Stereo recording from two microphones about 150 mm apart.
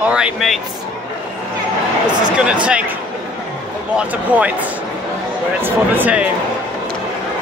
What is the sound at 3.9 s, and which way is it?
Speech, 10° right (ahead or behind).